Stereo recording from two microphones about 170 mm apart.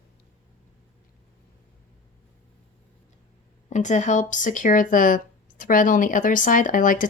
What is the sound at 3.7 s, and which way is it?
Speech, 45° left (ahead or behind).